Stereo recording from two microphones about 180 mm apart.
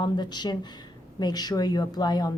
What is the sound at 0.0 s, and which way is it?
Speech, 25° left (ahead or behind).